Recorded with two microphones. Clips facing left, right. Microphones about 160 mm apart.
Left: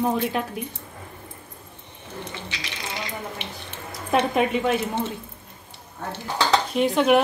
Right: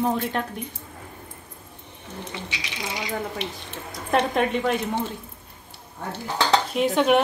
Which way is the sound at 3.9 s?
5° left (ahead or behind).